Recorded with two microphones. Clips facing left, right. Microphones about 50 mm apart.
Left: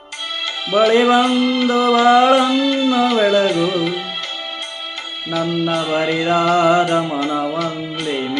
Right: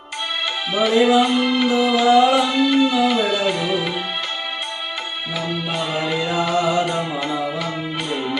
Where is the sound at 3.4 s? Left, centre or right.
Centre.